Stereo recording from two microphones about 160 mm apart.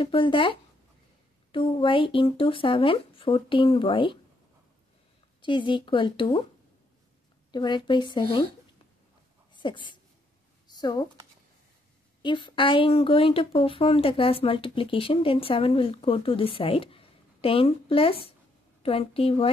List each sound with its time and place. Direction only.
0.0 s speech: 30° left (ahead or behind)
5.4 s speech: 30° left (ahead or behind)
7.5 s speech: 30° left (ahead or behind)
9.5 s a sound: 30° left (ahead or behind)
10.7 s speech: 25° left (ahead or behind)
12.2 s speech: 30° left (ahead or behind)